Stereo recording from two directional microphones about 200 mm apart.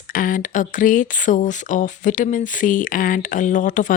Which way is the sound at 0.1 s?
40° left (ahead or behind).